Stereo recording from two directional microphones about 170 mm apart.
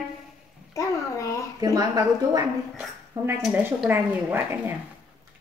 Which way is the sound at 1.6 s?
20° right (ahead or behind).